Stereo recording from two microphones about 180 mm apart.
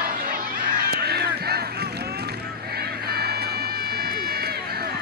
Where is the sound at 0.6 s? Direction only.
60° right (ahead or behind).